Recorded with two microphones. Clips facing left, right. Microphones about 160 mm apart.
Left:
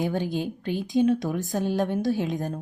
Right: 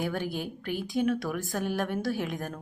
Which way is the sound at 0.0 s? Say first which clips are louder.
Left 5 dB; 20° left (ahead or behind).